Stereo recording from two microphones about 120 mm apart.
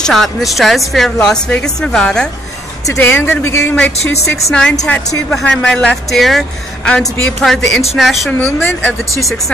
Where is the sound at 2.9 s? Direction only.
15° left (ahead or behind).